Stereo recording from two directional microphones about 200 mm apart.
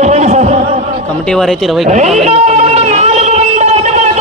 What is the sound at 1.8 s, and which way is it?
Speech, 35° right (ahead or behind).